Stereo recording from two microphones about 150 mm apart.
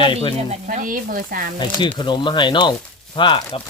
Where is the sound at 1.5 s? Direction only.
30° left (ahead or behind).